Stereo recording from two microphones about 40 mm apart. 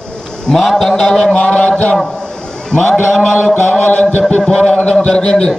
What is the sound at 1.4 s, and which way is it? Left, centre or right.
Speech, left.